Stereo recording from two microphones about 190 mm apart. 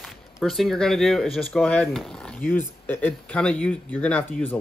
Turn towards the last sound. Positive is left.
turn(degrees=10)  # may be behind; listen again after turning